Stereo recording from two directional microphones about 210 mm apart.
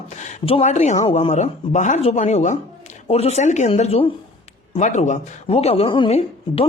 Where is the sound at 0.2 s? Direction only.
30° left (ahead or behind).